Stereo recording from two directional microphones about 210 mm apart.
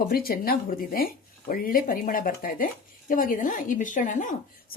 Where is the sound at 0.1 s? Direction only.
45° left (ahead or behind).